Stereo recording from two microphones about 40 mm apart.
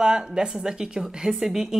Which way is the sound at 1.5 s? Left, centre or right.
Centre.